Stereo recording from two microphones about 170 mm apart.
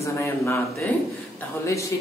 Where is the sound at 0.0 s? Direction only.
15° left (ahead or behind).